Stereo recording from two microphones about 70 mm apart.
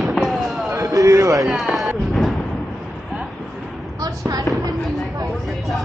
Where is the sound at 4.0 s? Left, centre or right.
Right.